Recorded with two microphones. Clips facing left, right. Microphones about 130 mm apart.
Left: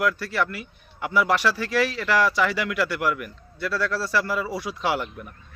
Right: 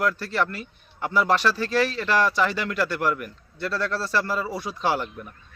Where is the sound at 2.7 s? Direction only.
35° right (ahead or behind).